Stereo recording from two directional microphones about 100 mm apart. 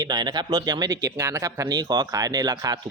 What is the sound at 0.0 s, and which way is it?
Speech, 45° right (ahead or behind).